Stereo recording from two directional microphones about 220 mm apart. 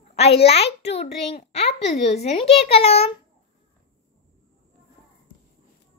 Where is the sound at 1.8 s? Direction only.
30° left (ahead or behind).